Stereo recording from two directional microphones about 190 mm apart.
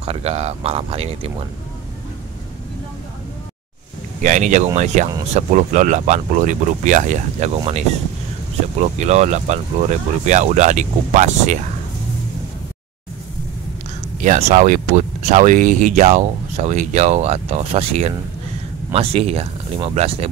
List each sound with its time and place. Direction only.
0.0 s speech: 30° right (ahead or behind)
4.2 s speech: 40° right (ahead or behind)
9.0 s speech: 35° right (ahead or behind)
14.2 s speech: 40° right (ahead or behind)